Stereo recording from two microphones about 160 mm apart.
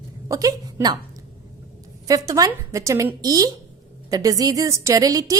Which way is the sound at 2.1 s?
20° right (ahead or behind).